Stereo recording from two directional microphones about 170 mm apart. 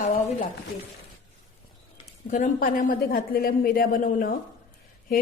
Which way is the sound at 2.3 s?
55° left (ahead or behind).